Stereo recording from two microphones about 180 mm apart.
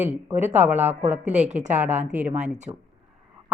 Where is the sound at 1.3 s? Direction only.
40° right (ahead or behind).